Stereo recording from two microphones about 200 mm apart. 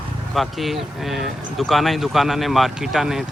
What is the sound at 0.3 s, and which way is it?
Speech, centre (ahead or behind).